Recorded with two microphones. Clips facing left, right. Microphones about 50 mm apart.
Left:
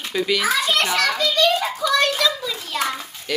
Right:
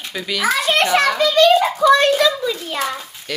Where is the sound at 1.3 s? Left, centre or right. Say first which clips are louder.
Right 7 dB; right.